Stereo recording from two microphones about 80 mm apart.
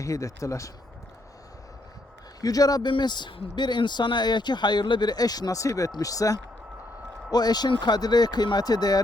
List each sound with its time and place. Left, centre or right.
0.0 s speech: left
2.4 s speech: left
2.9 s speech: left
7.3 s speech: left